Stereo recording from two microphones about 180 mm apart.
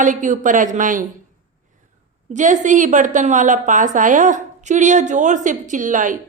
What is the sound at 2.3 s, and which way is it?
A woman's voice, 45° right (ahead or behind).